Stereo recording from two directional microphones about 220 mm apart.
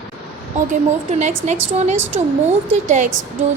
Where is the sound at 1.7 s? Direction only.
30° right (ahead or behind).